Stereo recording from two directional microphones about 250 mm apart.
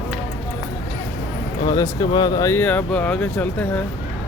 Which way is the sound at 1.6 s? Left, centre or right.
Centre.